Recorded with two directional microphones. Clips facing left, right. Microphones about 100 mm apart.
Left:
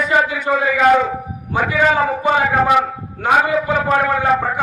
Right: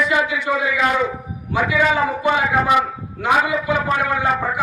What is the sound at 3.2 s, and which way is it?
Speech, 40° left (ahead or behind).